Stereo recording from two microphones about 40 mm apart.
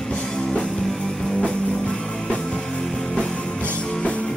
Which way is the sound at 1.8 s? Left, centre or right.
Left.